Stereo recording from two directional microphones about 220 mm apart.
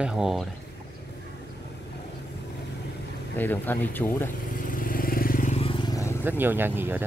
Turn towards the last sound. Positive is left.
turn(degrees=-10)  # may be behind; listen again after turning